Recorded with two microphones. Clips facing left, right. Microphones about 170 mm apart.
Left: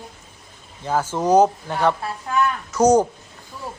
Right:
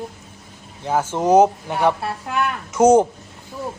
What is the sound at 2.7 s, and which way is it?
Speech, 25° right (ahead or behind).